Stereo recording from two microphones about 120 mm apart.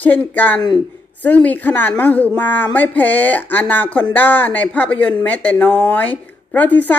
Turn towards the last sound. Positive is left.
turn(degrees=15)  # may be behind; listen again after turning